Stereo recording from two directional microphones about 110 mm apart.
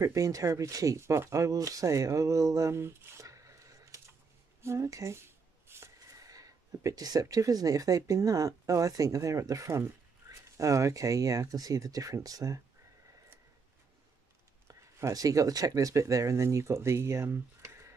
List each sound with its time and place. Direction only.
0.0 s speech: 30° right (ahead or behind)
14.7 s speech: 30° right (ahead or behind)